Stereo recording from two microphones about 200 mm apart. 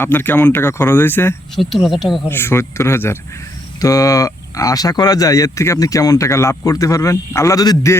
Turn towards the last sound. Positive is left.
turn(degrees=15)  # may be behind; listen again after turning